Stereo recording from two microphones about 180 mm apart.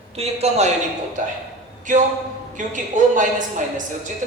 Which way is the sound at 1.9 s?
45° right (ahead or behind).